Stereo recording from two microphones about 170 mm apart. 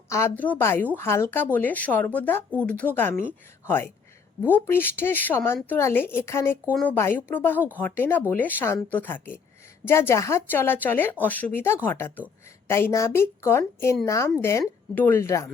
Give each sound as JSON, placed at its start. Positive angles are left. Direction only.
{"t": 0.1, "sound": "speech", "side_deg": 15}